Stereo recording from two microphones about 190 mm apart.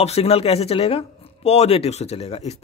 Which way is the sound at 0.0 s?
30° left (ahead or behind).